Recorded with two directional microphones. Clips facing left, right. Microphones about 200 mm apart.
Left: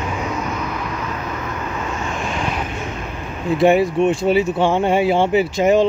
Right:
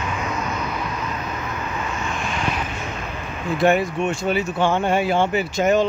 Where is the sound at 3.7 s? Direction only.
30° left (ahead or behind).